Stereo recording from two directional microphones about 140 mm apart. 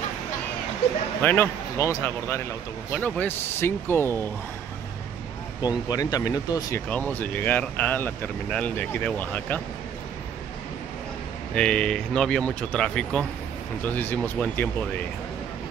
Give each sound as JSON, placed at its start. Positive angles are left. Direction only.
{"t": 1.2, "sound": "speech", "side_deg": 15}
{"t": 5.6, "sound": "speech", "side_deg": 30}
{"t": 6.9, "sound": "speech", "side_deg": 10}
{"t": 11.5, "sound": "speech", "side_deg": 5}